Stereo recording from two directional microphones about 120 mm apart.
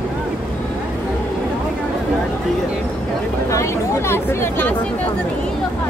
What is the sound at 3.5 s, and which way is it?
Chatter, 20° left (ahead or behind).